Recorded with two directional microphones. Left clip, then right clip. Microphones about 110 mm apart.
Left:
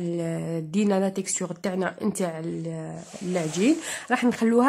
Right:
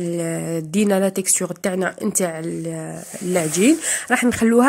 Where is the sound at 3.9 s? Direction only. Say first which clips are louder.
Right 6 dB; 25° right (ahead or behind).